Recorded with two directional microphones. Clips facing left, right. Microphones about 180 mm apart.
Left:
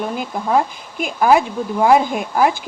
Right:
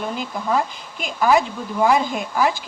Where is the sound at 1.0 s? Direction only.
50° left (ahead or behind).